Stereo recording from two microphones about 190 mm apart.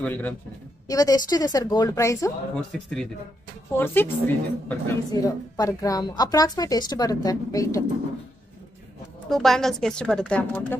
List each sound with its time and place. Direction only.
0.0 s a woman's voice: 10° left (ahead or behind)
0.8 s a woman's voice: 20° left (ahead or behind)
2.7 s a woman's voice: centre (ahead or behind); by 7.8 s 15° left (ahead or behind)
9.3 s speech: centre (ahead or behind)